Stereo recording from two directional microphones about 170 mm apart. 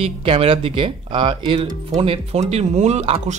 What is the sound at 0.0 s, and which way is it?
Speech, 35° right (ahead or behind).